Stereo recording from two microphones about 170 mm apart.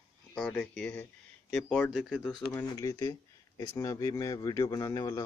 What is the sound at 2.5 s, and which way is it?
A man's voice, 20° left (ahead or behind).